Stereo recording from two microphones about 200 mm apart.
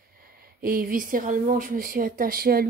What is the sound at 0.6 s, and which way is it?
Speech, 45° right (ahead or behind).